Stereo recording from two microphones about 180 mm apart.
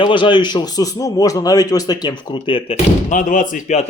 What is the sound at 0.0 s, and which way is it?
A man's voice, 25° left (ahead or behind).